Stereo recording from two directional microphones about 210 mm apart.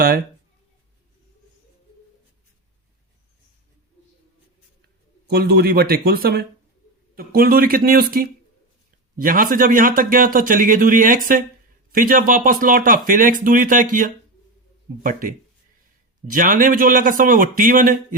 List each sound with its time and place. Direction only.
5.3 s speech: 50° right (ahead or behind)
15.0 s speech: 40° right (ahead or behind)